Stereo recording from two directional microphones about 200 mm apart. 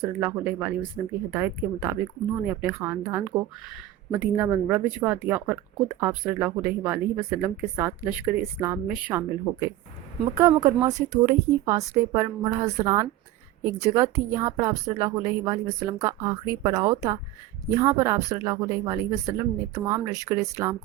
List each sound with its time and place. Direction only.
0.0 s speech: 10° right (ahead or behind)